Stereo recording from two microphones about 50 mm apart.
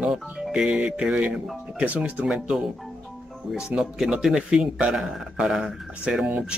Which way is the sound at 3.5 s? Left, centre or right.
Centre.